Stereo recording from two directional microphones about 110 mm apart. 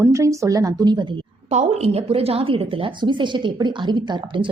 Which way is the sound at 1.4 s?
70° right (ahead or behind).